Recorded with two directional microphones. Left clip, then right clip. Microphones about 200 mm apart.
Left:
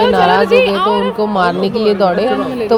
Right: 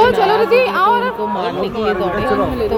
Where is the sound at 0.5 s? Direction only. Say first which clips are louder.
Left 1 dB; 5° right (ahead or behind).